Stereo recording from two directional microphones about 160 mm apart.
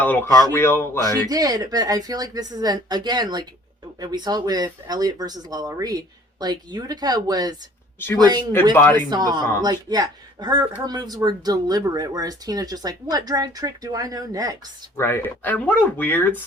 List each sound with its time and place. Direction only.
0.0 s speech: 10° left (ahead or behind)
1.3 s speech: 25° right (ahead or behind)
8.7 s speech: 15° left (ahead or behind)
9.0 s speech: 25° right (ahead or behind)
14.9 s speech: 15° left (ahead or behind)